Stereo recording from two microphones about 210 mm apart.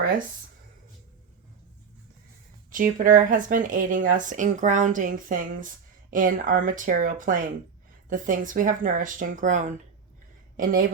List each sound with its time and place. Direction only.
2.7 s a woman's voice: 40° right (ahead or behind)